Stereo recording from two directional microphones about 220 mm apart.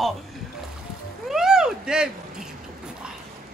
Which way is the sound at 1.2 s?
Centre (ahead or behind).